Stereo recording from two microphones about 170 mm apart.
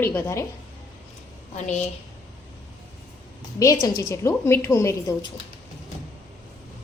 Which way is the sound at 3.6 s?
20° left (ahead or behind).